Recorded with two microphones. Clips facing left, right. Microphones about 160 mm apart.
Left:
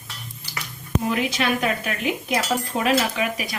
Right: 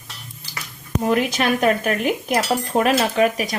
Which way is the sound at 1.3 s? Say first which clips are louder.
Right 5 dB; 45° right (ahead or behind).